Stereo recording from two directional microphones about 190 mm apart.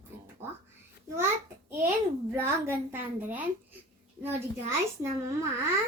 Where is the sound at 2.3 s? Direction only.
10° right (ahead or behind).